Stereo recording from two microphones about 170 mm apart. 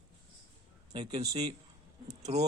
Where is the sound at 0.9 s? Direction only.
25° right (ahead or behind).